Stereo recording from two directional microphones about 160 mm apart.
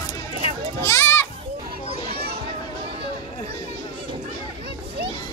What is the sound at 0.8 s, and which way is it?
Children playing, 15° left (ahead or behind).